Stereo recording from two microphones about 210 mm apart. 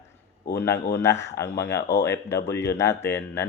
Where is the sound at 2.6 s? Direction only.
10° left (ahead or behind).